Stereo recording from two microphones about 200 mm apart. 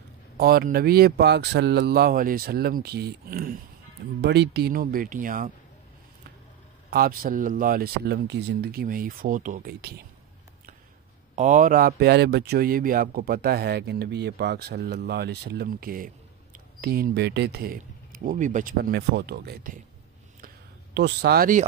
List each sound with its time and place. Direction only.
0.4 s a man's voice: 50° right (ahead or behind)
6.9 s a man's voice: 45° right (ahead or behind)
11.3 s a man's voice: 40° right (ahead or behind)
20.3 s a sound: 50° right (ahead or behind)